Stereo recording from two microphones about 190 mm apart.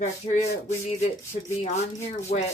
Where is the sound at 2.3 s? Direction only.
35° left (ahead or behind).